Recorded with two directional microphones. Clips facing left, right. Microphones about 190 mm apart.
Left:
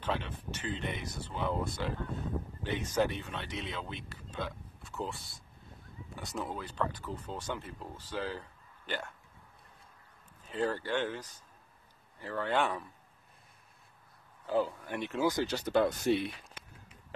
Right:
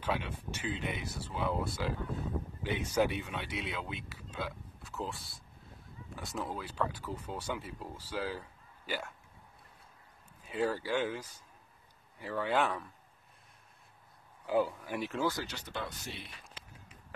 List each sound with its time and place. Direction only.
0.0 s speech: 10° right (ahead or behind)
10.4 s speech: 10° right (ahead or behind)
14.4 s speech: 10° right (ahead or behind)
15.4 s speech: 40° left (ahead or behind)